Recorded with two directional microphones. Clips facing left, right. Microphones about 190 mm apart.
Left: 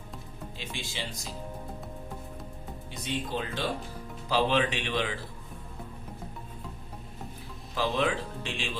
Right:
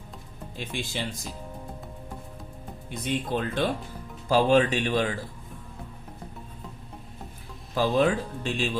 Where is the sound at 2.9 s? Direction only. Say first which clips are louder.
Right 5 dB; 55° right (ahead or behind).